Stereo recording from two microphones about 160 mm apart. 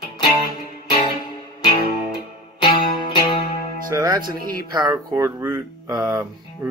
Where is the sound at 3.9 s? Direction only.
25° right (ahead or behind).